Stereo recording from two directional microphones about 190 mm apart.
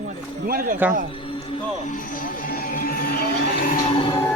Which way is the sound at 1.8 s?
45° left (ahead or behind).